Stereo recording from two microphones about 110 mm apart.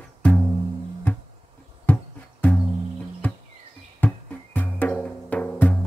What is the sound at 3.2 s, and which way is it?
Music, 15° left (ahead or behind).